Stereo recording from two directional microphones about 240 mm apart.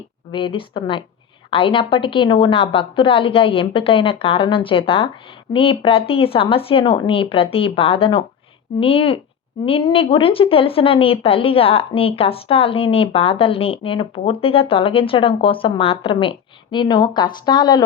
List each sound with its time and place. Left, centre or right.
0.3 s a woman's voice: centre